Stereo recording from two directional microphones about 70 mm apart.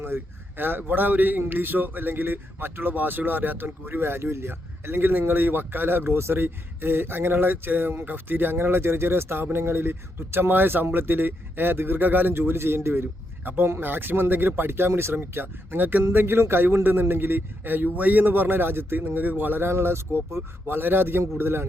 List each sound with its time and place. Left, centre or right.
0.0 s speech: right